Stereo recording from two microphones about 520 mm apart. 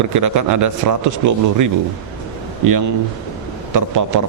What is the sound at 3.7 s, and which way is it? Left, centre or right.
Speech, right.